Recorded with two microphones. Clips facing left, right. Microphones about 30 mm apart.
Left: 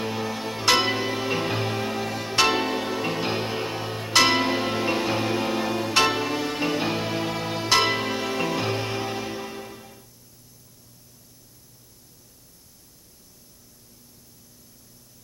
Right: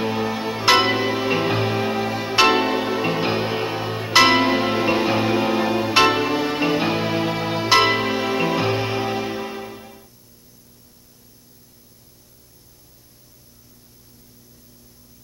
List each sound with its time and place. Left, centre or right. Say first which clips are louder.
0.0 s music: right 6 dB; centre